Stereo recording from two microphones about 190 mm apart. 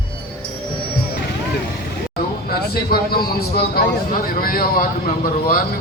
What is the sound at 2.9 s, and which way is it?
A man's voice, 55° left (ahead or behind).